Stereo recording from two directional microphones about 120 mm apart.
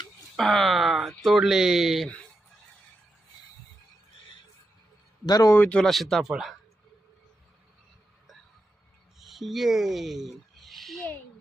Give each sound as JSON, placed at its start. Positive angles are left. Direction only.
{"t": 0.3, "sound": "speech", "side_deg": 0}
{"t": 5.2, "sound": "a man's voice", "side_deg": 30}
{"t": 5.5, "sound": "speech", "side_deg": 10}
{"t": 9.1, "sound": "speech", "side_deg": 0}